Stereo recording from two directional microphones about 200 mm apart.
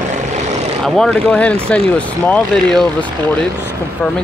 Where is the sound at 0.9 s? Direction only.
5° left (ahead or behind).